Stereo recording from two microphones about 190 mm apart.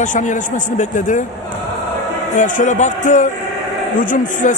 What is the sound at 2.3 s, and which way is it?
Speech, 40° left (ahead or behind).